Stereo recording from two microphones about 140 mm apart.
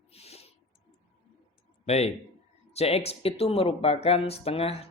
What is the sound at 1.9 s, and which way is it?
Speech, 50° left (ahead or behind).